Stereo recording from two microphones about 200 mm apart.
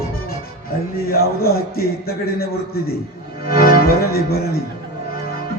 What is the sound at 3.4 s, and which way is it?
Speech, 50° left (ahead or behind).